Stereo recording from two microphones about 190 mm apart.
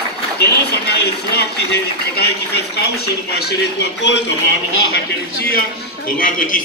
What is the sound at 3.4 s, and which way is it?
Speech, 60° left (ahead or behind).